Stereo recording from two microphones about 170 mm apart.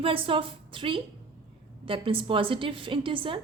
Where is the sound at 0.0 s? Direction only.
30° right (ahead or behind).